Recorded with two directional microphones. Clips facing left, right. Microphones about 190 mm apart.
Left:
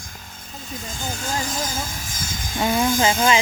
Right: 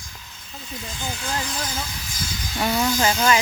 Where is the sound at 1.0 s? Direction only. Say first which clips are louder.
Left 2 dB; 45° left (ahead or behind).